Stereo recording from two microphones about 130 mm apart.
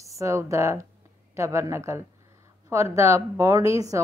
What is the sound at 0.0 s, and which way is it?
Speech, 25° right (ahead or behind).